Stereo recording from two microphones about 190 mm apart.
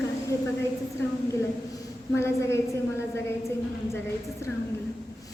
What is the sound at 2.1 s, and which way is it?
Speech, 15° left (ahead or behind).